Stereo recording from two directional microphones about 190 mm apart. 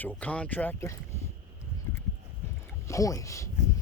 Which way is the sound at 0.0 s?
10° left (ahead or behind).